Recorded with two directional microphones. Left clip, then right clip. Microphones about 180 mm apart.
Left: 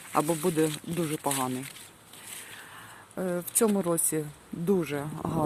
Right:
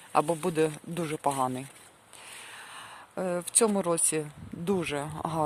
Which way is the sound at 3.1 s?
30° right (ahead or behind).